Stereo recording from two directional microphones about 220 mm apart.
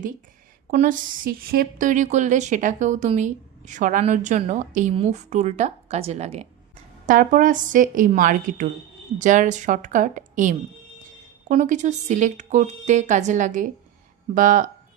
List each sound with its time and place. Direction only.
0.7 s a woman's voice: 35° right (ahead or behind)